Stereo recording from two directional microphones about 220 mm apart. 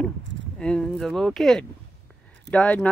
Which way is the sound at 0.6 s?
5° left (ahead or behind).